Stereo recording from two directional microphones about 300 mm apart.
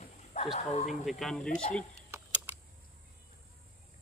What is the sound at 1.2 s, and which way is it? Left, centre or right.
Speech, centre.